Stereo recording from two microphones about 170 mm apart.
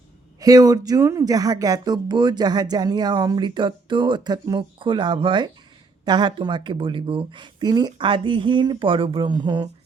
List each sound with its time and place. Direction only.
0.3 s speech: 20° right (ahead or behind)